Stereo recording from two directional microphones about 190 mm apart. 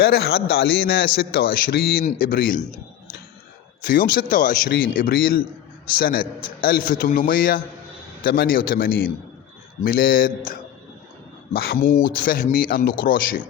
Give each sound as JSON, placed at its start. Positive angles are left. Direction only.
{"t": 0.0, "sound": "a man's voice", "side_deg": 55}